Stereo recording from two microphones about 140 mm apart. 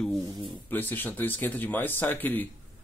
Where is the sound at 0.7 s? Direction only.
15° left (ahead or behind).